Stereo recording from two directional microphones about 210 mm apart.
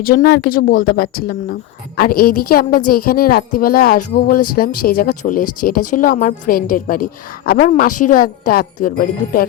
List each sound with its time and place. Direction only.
0.0 s a woman's voice: 45° left (ahead or behind)